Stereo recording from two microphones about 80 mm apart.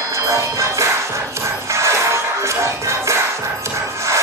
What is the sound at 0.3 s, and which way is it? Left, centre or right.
Music, right.